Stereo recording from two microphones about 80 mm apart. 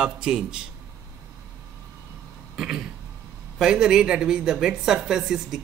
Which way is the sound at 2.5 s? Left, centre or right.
Centre.